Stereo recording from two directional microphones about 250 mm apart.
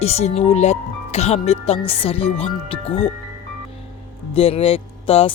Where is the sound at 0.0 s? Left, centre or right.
Left.